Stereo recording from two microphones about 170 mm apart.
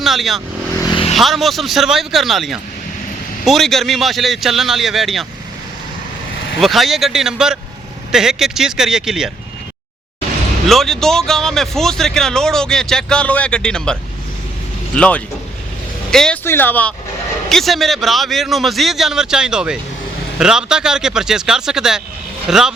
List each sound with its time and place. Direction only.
0.0 s speech: centre (ahead or behind)
0.8 s vehicle: 30° left (ahead or behind)
1.1 s speech: centre (ahead or behind)
6.6 s speech: centre (ahead or behind)
10.7 s speech: centre (ahead or behind)